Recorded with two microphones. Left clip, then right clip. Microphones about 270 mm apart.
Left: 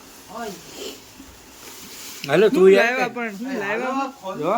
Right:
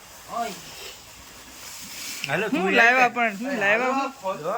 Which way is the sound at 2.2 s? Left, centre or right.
Left.